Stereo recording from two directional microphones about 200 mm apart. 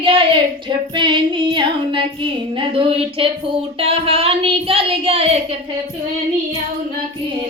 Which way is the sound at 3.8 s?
30° right (ahead or behind).